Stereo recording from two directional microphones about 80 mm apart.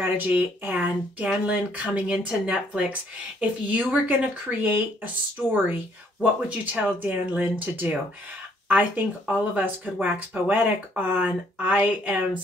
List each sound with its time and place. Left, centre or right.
0.0 s speech: right